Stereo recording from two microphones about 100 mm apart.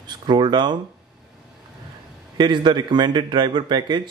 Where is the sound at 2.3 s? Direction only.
50° right (ahead or behind).